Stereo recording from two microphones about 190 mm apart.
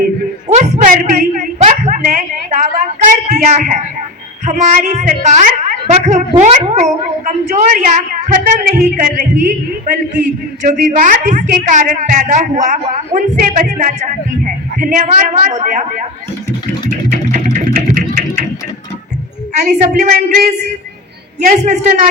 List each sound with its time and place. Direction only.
0.4 s a sound: 35° right (ahead or behind)
3.1 s a woman's voice: 40° right (ahead or behind)
10.6 s a woman's voice: 45° right (ahead or behind)
17.1 s music: 45° right (ahead or behind)
19.5 s a woman's voice: 40° right (ahead or behind)